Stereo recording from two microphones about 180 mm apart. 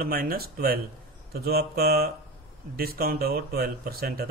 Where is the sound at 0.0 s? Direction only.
55° right (ahead or behind).